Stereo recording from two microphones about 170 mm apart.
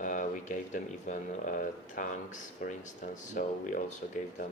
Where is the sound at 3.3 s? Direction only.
50° left (ahead or behind).